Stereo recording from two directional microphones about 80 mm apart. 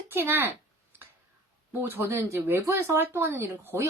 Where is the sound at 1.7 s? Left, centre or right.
Right.